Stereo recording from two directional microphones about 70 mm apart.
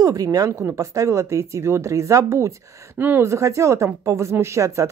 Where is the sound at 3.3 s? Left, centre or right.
Right.